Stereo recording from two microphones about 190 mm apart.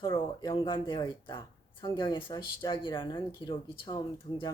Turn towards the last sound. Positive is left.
turn(degrees=25)  # may be behind; listen again after turning